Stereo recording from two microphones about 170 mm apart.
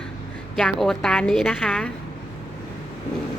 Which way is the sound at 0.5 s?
Centre (ahead or behind).